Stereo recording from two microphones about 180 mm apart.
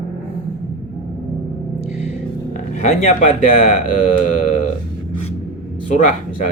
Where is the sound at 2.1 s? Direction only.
40° left (ahead or behind).